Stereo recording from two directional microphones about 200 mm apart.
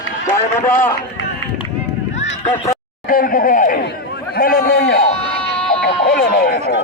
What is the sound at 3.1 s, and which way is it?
A man's voice, 45° left (ahead or behind).